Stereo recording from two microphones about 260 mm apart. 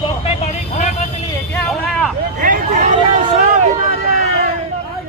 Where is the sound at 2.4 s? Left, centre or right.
Right.